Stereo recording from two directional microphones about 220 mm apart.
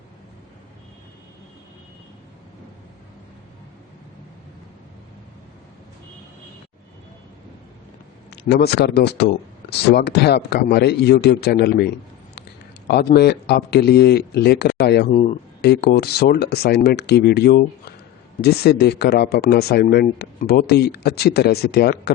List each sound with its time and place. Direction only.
8.3 s speech: 45° left (ahead or behind)
12.9 s speech: 45° left (ahead or behind)
15.1 s speech: 30° left (ahead or behind)
15.6 s speech: 45° left (ahead or behind)